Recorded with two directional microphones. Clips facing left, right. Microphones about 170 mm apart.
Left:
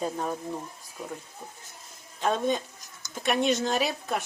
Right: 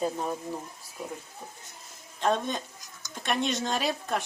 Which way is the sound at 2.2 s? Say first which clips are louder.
Left 1 dB; centre (ahead or behind).